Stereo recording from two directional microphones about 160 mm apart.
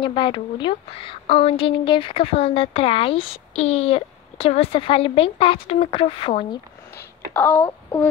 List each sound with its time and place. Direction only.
0.0 s a woman's voice: 30° left (ahead or behind)
7.0 s speech: 10° left (ahead or behind)